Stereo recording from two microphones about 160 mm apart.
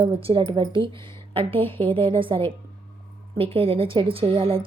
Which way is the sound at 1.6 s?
15° left (ahead or behind).